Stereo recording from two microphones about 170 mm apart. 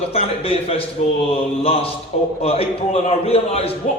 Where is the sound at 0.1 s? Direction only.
35° left (ahead or behind).